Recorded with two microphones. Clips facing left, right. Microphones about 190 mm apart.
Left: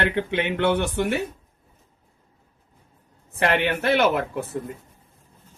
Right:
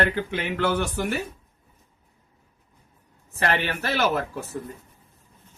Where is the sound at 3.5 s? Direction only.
60° left (ahead or behind).